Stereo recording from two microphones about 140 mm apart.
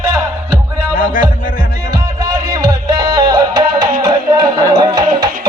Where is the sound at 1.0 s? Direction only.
75° left (ahead or behind).